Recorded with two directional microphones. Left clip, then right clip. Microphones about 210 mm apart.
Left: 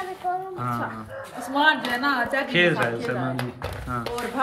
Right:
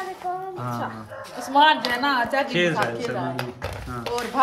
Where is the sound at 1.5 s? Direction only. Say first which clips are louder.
Right 3 dB; 30° right (ahead or behind).